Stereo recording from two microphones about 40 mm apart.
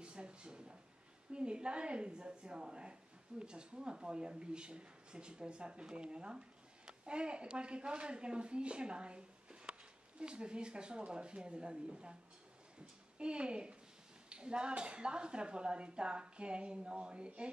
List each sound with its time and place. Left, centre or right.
0.0 s a sound: right
1.3 s a woman's voice: right
13.2 s a woman's voice: right